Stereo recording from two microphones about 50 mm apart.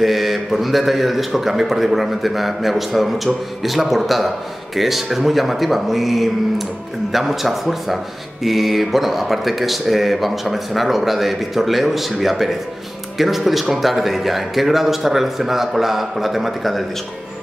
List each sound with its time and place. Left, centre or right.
0.0 s speech: centre